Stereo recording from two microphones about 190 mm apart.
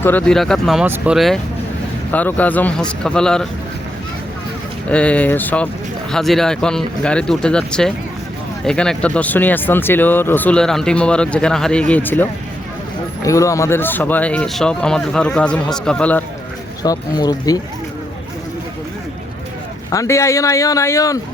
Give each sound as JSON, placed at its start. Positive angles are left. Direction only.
{"t": 0.0, "sound": "speech", "side_deg": 10}
{"t": 4.9, "sound": "speech", "side_deg": 5}
{"t": 16.8, "sound": "speech", "side_deg": 20}
{"t": 19.9, "sound": "speech", "side_deg": 15}